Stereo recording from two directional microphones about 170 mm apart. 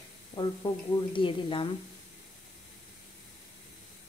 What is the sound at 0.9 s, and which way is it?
Speech, 30° left (ahead or behind).